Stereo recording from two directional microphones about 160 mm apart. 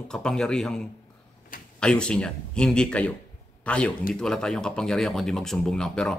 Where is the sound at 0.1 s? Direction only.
5° left (ahead or behind).